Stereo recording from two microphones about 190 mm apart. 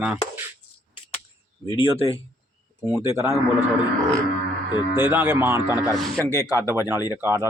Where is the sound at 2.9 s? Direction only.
15° right (ahead or behind).